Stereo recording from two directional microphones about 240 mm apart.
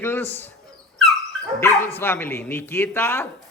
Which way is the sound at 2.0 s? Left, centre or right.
Centre.